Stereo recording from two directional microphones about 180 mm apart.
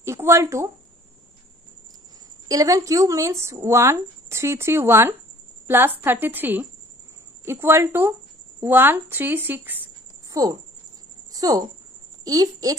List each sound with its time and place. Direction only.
0.0 s speech: 15° right (ahead or behind)
2.4 s a woman's voice: 20° right (ahead or behind)